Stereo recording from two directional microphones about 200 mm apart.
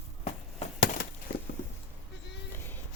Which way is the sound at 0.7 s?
45° left (ahead or behind).